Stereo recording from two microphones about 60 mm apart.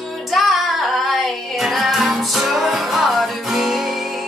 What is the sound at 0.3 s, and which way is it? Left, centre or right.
Music, centre.